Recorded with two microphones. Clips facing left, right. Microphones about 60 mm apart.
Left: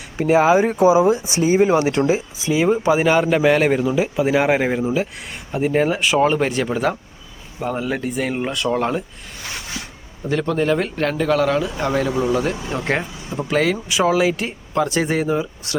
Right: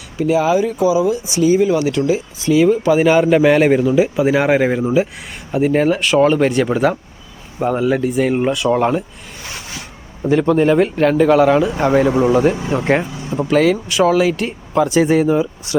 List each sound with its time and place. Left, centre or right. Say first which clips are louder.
0.2 s speech: even; left
2.4 s speech: right 7 dB; centre
3.0 s speech: right 4 dB; centre
10.2 s a man's voice: right 6 dB; centre
11.8 s a man's voice: right 6 dB; right; by 15.7 s centre